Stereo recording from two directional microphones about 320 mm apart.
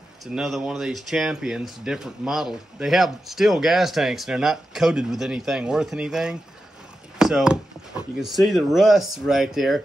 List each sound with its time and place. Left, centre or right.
0.2 s speech: centre